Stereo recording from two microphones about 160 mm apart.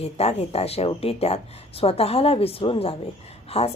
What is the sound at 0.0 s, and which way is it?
A woman's voice, 40° left (ahead or behind).